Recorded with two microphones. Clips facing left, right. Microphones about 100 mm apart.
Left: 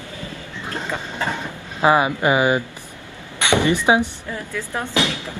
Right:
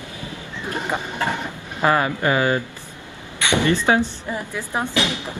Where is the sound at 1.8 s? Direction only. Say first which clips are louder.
Left 2 dB; 15° left (ahead or behind).